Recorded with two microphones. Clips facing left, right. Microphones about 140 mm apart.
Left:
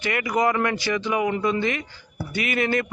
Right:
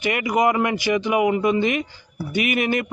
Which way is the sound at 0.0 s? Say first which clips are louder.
Right 3 dB; 15° right (ahead or behind).